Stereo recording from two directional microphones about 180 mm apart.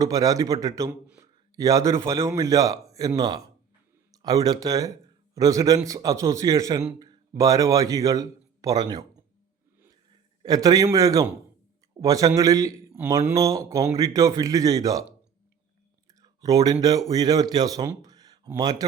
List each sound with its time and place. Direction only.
0.0 s speech: 20° right (ahead or behind)
1.0 s a sound: 5° right (ahead or behind)
1.5 s speech: 20° right (ahead or behind)
10.1 s a man's voice: 20° right (ahead or behind)
16.2 s a sound: 20° right (ahead or behind)
17.1 s speech: 20° right (ahead or behind)